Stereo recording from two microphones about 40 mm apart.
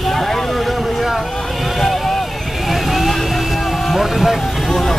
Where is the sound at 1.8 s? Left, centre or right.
Centre.